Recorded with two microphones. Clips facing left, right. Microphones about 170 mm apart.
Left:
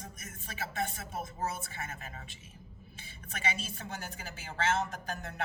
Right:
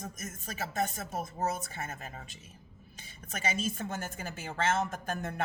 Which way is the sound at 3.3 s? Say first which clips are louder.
Right 4 dB; 40° right (ahead or behind).